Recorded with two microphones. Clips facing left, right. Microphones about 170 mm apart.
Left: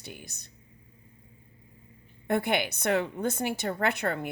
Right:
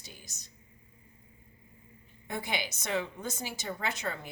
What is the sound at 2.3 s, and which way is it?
A woman's voice, 60° left (ahead or behind).